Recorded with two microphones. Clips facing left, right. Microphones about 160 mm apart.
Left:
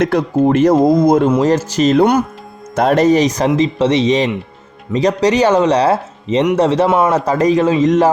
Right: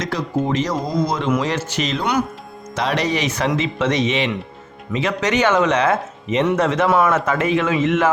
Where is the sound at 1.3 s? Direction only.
40° left (ahead or behind).